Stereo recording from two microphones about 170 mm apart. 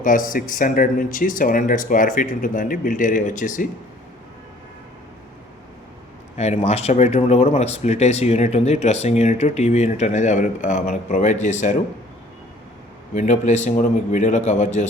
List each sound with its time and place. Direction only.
0.0 s speech: 50° left (ahead or behind)
6.3 s speech: 40° left (ahead or behind)
13.1 s speech: 45° left (ahead or behind)